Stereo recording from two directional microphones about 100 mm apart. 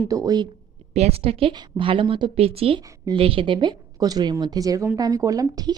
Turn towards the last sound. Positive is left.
turn(degrees=-40)  # may be behind; listen again after turning